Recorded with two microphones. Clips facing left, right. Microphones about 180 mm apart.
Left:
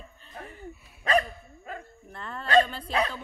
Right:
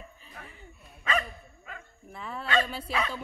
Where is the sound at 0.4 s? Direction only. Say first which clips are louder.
Left 8 dB; 40° left (ahead or behind).